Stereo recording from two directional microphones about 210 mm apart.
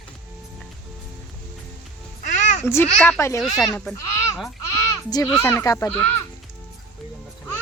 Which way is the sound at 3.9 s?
15° left (ahead or behind).